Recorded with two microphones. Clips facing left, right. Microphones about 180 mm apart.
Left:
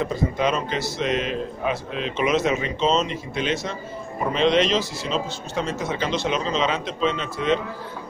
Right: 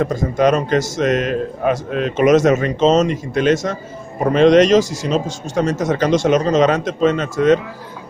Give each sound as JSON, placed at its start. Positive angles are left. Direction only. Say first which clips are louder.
{"t": 0.0, "sound": "a man's voice", "louder": "right 7 dB", "side_deg": -45}